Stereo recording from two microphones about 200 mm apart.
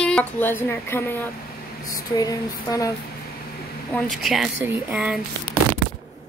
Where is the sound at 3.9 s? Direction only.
5° left (ahead or behind).